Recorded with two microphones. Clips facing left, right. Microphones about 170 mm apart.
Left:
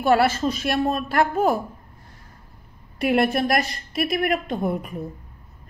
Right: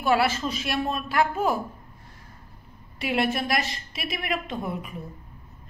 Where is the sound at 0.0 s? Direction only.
45° left (ahead or behind).